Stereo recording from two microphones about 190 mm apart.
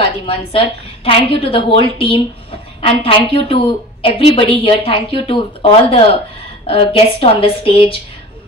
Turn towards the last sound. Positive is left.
turn(degrees=30)  # may be behind; listen again after turning